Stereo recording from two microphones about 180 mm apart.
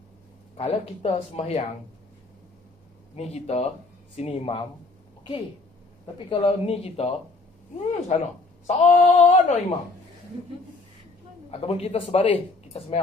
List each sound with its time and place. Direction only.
0.6 s speech: 35° left (ahead or behind)
3.2 s speech: 35° left (ahead or behind)
6.1 s speech: 30° left (ahead or behind)
11.6 s speech: 35° left (ahead or behind)